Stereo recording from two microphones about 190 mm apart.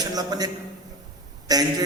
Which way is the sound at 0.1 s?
20° right (ahead or behind).